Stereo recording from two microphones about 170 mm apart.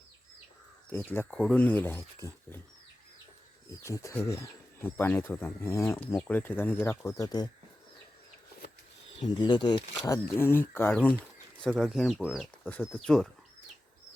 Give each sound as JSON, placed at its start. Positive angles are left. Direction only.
{"t": 0.9, "sound": "speech", "side_deg": 10}
{"t": 3.8, "sound": "speech", "side_deg": 15}
{"t": 9.2, "sound": "speech", "side_deg": 25}
{"t": 10.2, "sound": "speech", "side_deg": 15}